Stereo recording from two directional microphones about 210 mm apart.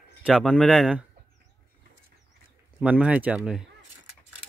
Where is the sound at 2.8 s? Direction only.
5° right (ahead or behind).